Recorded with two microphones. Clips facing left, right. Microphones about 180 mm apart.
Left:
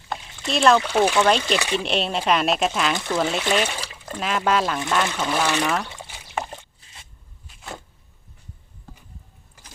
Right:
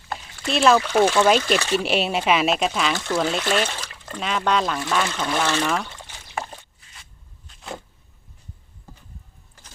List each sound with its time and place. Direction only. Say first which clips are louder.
0.4 s speech: even; centre (ahead or behind)
0.9 s speech: right 1 dB; 10° left (ahead or behind)
1.2 s speech: right 2 dB; 5° right (ahead or behind)
2.9 s speech: even; 15° left (ahead or behind)
4.2 s speech: left 1 dB; 5° left (ahead or behind)
5.7 s trickle: even; 5° left (ahead or behind)
6.6 s squish: left 2 dB; 25° left (ahead or behind)
7.4 s a sound: right 2 dB; centre (ahead or behind)